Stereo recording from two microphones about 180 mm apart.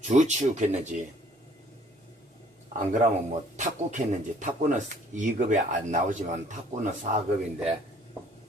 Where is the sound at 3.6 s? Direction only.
45° right (ahead or behind).